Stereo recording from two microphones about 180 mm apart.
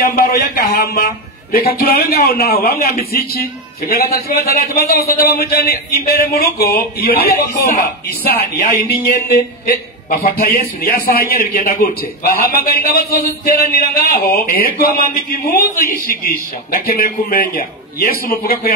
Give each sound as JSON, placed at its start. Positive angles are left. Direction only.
{"t": 0.0, "sound": "a man's voice", "side_deg": 55}